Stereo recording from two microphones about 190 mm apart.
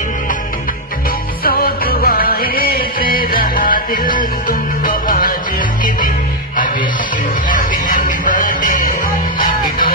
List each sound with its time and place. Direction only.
1.4 s music: 50° left (ahead or behind)
7.4 s music: 45° left (ahead or behind)